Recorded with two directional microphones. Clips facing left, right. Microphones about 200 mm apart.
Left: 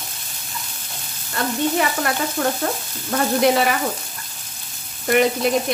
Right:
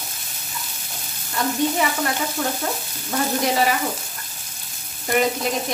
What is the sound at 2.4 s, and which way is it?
Frying, 55° left (ahead or behind).